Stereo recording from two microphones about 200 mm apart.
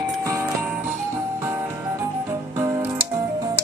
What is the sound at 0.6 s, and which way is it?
Music, 10° right (ahead or behind).